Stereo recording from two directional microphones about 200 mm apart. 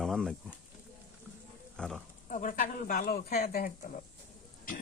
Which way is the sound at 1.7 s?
5° left (ahead or behind).